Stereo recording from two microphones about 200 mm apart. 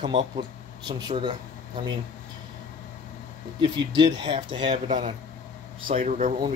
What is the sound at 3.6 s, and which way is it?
Speech, 20° right (ahead or behind).